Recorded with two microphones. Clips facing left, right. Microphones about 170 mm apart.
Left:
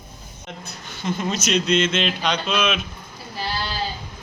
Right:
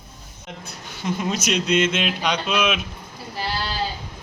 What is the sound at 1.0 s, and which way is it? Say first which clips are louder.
Speech: even; 5° right (ahead or behind).